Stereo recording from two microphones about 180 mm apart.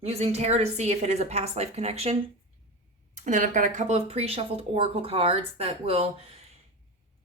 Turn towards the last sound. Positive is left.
turn(degrees=-30)  # may be behind; listen again after turning